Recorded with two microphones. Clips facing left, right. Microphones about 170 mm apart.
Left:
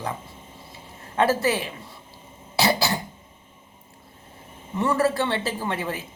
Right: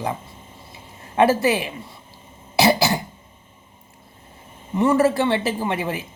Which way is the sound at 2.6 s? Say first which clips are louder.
Right 5 dB; 20° right (ahead or behind).